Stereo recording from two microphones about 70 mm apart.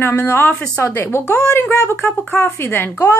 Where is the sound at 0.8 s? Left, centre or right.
Left.